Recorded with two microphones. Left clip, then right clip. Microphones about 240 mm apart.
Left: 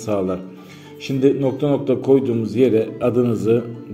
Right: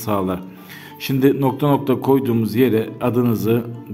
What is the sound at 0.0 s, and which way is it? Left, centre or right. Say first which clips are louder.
Speech: even; right.